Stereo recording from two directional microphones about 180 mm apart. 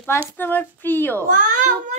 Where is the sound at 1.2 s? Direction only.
50° right (ahead or behind).